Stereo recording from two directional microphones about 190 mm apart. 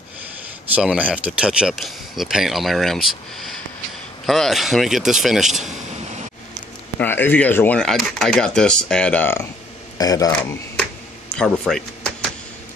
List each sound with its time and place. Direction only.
0.7 s speech: 5° right (ahead or behind)
7.0 s speech: 10° left (ahead or behind)
11.3 s a sound: 5° left (ahead or behind)